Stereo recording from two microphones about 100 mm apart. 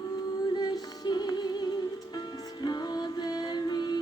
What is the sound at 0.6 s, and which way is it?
Music, 45° left (ahead or behind).